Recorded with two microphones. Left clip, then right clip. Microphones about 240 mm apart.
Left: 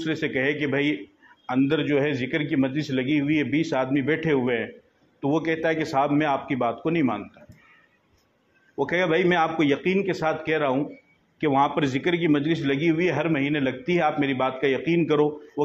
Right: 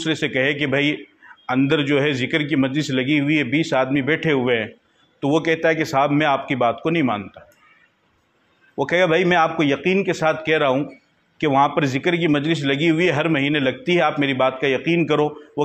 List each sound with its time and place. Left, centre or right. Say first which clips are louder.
0.0 s a man's voice: right 5 dB; right
8.7 s a man's voice: right 5 dB; right